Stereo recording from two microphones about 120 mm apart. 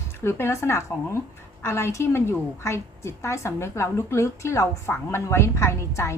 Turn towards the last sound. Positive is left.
turn(degrees=25)  # may be behind; listen again after turning